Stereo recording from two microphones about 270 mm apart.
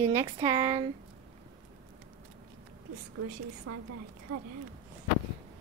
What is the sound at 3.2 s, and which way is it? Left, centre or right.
A woman's voice, right.